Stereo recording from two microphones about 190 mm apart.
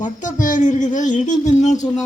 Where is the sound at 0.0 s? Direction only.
40° left (ahead or behind).